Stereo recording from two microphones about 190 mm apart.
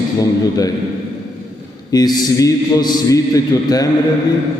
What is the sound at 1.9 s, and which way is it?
A man's voice, 20° left (ahead or behind).